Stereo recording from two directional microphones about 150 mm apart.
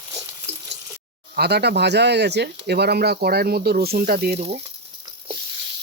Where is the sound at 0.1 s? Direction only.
20° right (ahead or behind).